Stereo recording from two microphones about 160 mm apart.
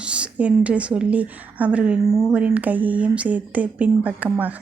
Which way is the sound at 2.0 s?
20° right (ahead or behind).